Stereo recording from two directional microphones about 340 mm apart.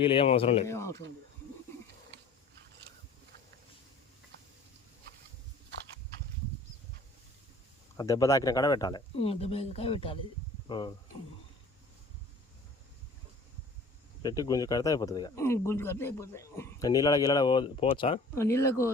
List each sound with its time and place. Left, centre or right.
0.0 s speech: centre
7.9 s speech: centre
14.2 s speech: centre